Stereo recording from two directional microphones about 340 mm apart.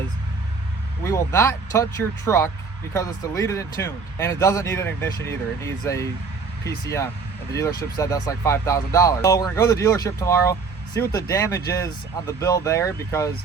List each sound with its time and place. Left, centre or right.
1.0 s speech: centre